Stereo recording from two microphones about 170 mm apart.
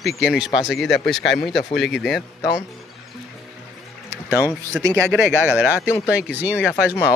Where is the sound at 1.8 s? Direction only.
Centre (ahead or behind).